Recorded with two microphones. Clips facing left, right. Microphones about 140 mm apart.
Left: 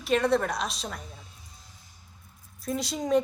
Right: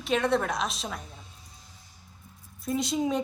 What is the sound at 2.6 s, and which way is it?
Speech, centre (ahead or behind).